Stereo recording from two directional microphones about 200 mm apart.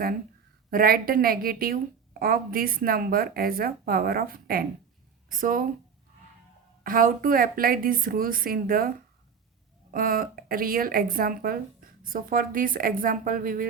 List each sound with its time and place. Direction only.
0.7 s speech: 45° right (ahead or behind)
6.8 s speech: 45° right (ahead or behind)
9.9 s speech: 45° right (ahead or behind)